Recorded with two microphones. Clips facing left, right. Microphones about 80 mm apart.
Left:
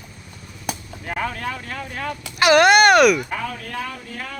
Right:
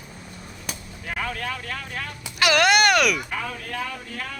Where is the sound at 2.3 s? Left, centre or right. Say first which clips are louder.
Left 5 dB; left.